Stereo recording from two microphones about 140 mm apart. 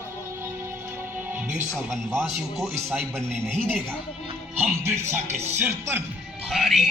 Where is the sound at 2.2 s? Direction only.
Centre (ahead or behind).